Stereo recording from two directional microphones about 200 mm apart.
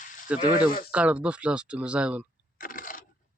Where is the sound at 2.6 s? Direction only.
45° left (ahead or behind).